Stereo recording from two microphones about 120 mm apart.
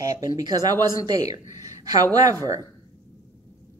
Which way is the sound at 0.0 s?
30° right (ahead or behind).